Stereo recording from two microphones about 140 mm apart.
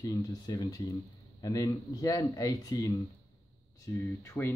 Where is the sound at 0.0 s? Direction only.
25° left (ahead or behind).